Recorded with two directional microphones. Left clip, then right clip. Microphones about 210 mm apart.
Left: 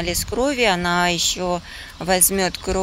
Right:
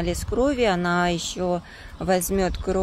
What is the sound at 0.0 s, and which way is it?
Speech, 5° right (ahead or behind).